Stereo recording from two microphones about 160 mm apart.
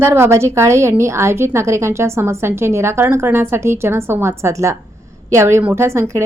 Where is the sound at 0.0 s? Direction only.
15° right (ahead or behind).